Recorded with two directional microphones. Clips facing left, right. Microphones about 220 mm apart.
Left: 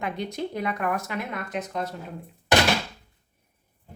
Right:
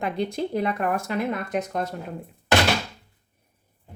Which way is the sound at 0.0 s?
30° right (ahead or behind).